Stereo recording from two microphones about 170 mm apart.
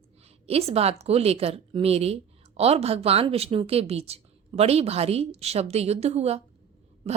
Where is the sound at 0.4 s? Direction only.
35° right (ahead or behind).